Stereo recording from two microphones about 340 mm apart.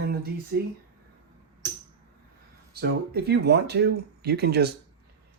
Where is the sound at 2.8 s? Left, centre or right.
Right.